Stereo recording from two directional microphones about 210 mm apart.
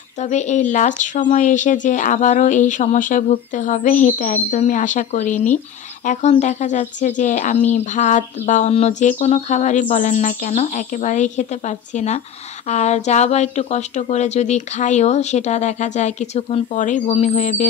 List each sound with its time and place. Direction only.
0.2 s speech: 35° left (ahead or behind)